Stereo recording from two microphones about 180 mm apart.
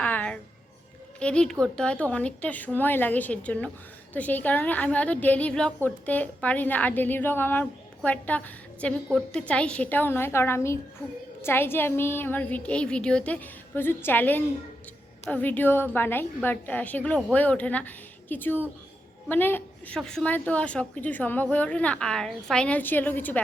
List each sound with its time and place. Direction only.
0.0 s music: 10° left (ahead or behind)
1.2 s a woman's voice: 5° left (ahead or behind)